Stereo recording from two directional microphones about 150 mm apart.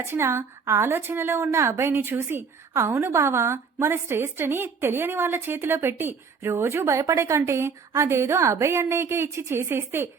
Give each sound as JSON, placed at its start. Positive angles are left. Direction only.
{"t": 0.0, "sound": "a woman's voice", "side_deg": -15}